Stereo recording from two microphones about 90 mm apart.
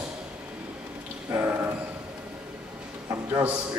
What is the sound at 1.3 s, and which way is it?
Speech, 30° right (ahead or behind).